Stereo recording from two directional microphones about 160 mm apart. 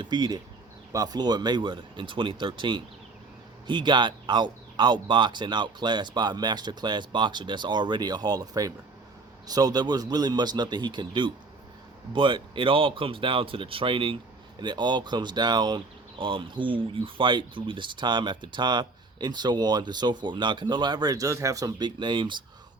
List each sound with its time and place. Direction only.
0.0 s speech: 25° right (ahead or behind)